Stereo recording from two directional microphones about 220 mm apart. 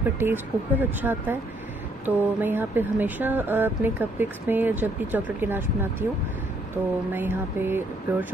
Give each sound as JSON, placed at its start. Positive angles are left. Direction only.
{"t": 0.2, "sound": "speech", "side_deg": -10}
{"t": 7.1, "sound": "speech", "side_deg": -10}